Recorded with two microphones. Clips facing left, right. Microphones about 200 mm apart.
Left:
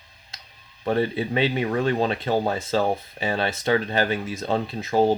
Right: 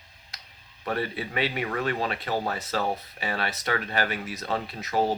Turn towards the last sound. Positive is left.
turn(degrees=25)  # may be behind; listen again after turning